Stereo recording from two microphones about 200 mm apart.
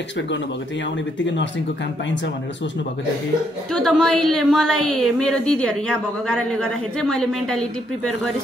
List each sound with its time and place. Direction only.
1.2 s speech: 65° left (ahead or behind)
3.7 s a woman's voice: centre (ahead or behind)